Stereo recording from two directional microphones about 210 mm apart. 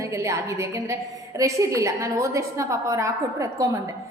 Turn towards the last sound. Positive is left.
turn(degrees=-15)  # may be behind; listen again after turning